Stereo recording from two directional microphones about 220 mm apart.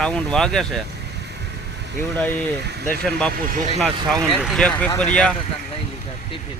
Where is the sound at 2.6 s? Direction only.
45° right (ahead or behind).